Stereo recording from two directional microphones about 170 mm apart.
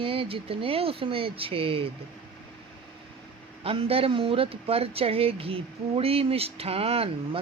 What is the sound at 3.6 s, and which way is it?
Speech, 35° right (ahead or behind).